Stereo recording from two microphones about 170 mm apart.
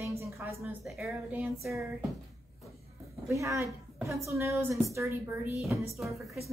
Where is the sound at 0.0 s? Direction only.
15° right (ahead or behind).